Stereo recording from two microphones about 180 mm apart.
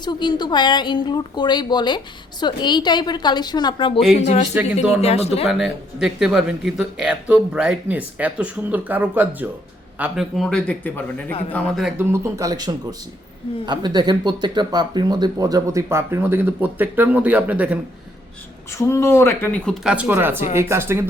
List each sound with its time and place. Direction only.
0.0 s a woman's voice: 25° left (ahead or behind)
4.2 s speech: 40° left (ahead or behind)
4.5 s speech: 10° right (ahead or behind)
4.9 s speech: 35° left (ahead or behind)
5.5 s speech: centre (ahead or behind)
11.9 s speech: 15° right (ahead or behind)
18.7 s speech: 15° left (ahead or behind)
19.8 s speech: 5° right (ahead or behind)